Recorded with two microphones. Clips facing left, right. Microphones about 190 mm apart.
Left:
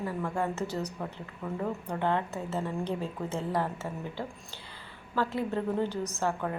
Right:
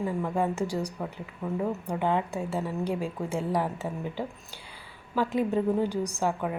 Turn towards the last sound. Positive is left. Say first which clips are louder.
# right 2 dB
turn(degrees=-10)  # may be behind; listen again after turning